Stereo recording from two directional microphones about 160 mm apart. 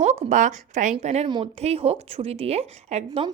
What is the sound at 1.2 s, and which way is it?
Speech, 30° right (ahead or behind).